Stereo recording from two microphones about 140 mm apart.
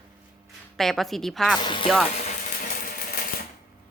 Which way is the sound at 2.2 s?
60° left (ahead or behind).